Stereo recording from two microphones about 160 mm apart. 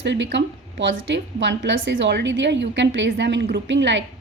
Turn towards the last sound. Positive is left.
turn(degrees=-90)